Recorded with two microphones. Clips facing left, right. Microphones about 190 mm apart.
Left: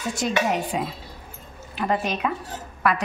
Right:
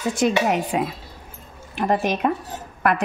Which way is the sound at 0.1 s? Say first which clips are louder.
Right 3 dB; 55° right (ahead or behind).